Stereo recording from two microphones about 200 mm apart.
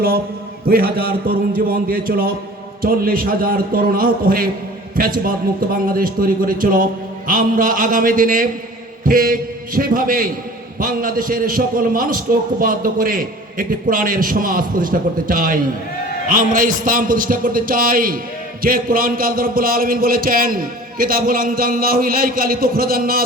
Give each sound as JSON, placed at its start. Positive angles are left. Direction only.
{"t": 0.6, "sound": "a man's voice", "side_deg": -50}